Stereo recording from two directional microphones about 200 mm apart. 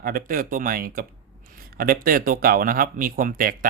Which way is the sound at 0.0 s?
45° right (ahead or behind).